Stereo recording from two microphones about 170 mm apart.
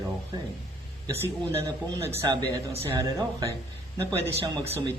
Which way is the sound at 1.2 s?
15° right (ahead or behind).